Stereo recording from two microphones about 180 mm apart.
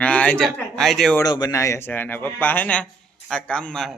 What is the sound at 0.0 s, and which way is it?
Speech, 5° left (ahead or behind).